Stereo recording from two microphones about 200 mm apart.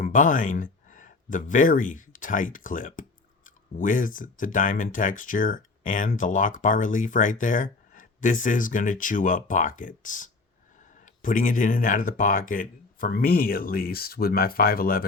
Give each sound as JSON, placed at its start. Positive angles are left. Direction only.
{"t": 0.0, "sound": "speech", "side_deg": 40}